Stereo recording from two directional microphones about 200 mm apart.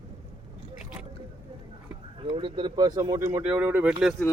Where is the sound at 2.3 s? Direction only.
25° right (ahead or behind).